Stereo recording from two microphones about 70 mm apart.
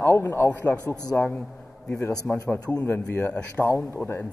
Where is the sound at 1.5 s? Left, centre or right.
Centre.